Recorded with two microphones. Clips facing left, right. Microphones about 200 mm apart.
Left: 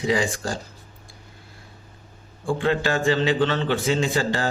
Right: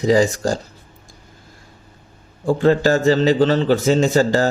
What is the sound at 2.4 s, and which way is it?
Speech, 40° right (ahead or behind).